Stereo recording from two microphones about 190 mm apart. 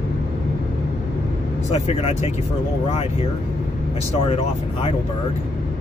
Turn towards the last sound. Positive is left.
turn(degrees=30)  # may be behind; listen again after turning